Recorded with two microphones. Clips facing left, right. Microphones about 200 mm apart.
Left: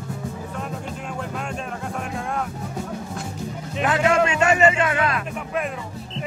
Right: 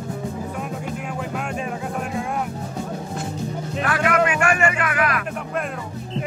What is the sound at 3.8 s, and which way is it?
Music, 25° left (ahead or behind).